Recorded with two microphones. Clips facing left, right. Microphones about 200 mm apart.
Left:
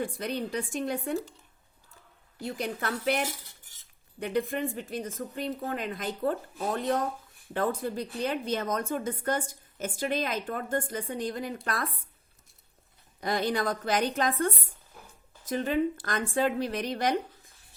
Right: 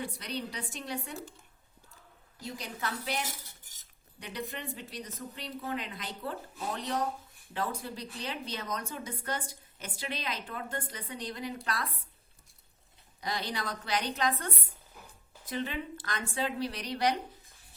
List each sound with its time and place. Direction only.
0.0 s a woman's voice: 50° left (ahead or behind)
2.4 s a woman's voice: 55° left (ahead or behind)
13.2 s a woman's voice: 50° left (ahead or behind)